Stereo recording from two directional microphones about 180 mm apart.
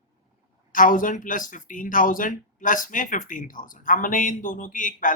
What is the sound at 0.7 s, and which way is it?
Speech, 50° left (ahead or behind).